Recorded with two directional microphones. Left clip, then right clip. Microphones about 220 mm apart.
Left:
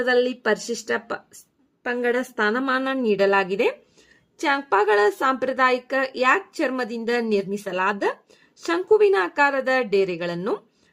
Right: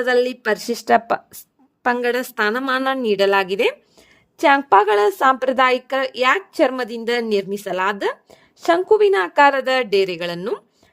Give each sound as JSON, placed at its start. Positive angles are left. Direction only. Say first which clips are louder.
{"t": 0.0, "sound": "a woman's voice", "louder": "right 3 dB", "side_deg": -45}